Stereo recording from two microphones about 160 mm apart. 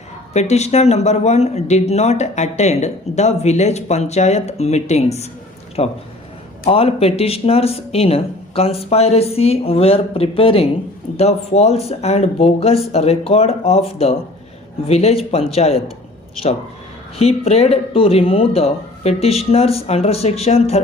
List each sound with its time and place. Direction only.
0.3 s speech: 45° left (ahead or behind)
17.2 s speech: 40° left (ahead or behind)